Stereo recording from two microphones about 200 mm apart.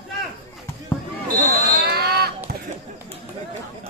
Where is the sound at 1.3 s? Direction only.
50° right (ahead or behind).